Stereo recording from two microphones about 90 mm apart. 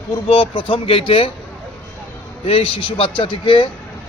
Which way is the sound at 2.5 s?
90° left.